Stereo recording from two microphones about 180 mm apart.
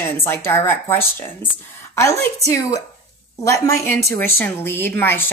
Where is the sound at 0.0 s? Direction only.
15° left (ahead or behind).